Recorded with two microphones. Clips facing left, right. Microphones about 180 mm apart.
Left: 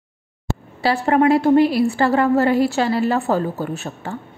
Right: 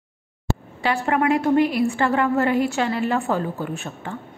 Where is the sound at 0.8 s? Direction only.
35° left (ahead or behind).